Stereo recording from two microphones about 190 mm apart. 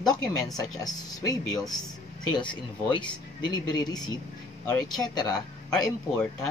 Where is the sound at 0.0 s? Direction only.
20° left (ahead or behind).